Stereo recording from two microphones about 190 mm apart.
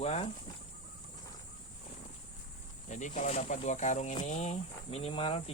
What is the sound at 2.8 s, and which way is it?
Speech, 40° left (ahead or behind).